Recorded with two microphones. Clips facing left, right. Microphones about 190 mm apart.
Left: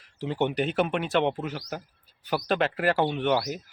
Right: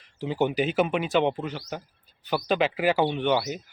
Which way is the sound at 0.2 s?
Centre (ahead or behind).